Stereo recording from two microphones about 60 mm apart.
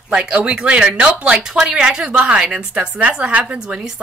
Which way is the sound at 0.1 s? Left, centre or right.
Centre.